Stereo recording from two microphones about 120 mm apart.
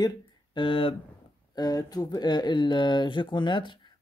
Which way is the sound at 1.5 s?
35° left (ahead or behind).